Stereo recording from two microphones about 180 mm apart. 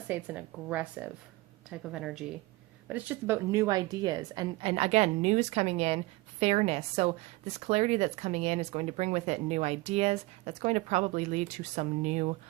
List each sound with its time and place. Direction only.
0.1 s a woman's voice: 10° right (ahead or behind)
4.6 s a woman's voice: 35° right (ahead or behind)